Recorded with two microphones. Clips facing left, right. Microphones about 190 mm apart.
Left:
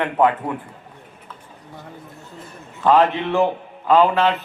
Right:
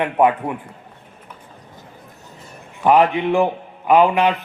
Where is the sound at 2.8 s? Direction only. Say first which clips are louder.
Right 1 dB; 15° right (ahead or behind).